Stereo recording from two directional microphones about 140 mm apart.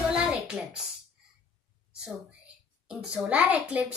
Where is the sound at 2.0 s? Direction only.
5° right (ahead or behind).